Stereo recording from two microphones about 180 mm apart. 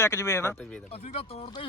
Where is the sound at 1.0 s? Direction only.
35° left (ahead or behind).